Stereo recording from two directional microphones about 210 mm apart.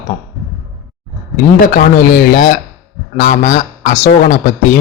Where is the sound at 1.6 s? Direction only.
40° left (ahead or behind).